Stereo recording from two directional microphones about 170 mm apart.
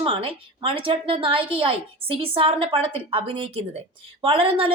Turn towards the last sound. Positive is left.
turn(degrees=-30)  # may be behind; listen again after turning